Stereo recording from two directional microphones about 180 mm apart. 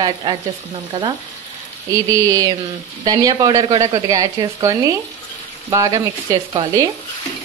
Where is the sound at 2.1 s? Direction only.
20° right (ahead or behind).